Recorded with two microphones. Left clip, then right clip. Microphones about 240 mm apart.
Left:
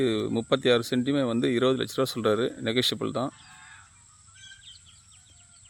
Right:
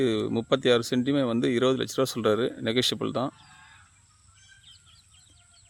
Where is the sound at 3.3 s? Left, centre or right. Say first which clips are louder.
Left 3 dB; left.